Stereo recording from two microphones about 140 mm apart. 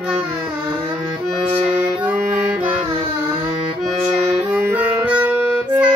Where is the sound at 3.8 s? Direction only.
Centre (ahead or behind).